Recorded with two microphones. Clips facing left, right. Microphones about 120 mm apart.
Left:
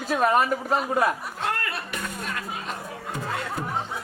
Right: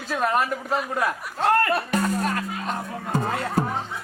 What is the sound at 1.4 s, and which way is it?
Music, 40° right (ahead or behind).